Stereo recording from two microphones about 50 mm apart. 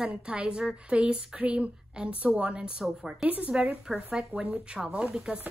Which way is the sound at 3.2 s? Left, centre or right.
Right.